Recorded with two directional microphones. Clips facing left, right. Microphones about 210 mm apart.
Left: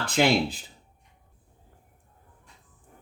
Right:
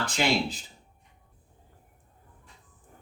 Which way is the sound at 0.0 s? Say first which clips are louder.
Left 4 dB; 55° left (ahead or behind).